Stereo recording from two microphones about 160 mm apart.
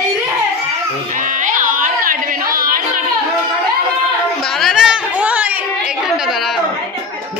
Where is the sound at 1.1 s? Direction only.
55° right (ahead or behind).